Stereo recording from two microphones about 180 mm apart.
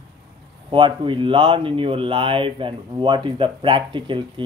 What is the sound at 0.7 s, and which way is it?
Speech, 25° right (ahead or behind).